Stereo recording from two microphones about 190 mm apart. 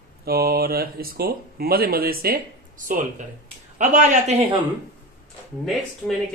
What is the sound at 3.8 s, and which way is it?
Speech, 40° right (ahead or behind).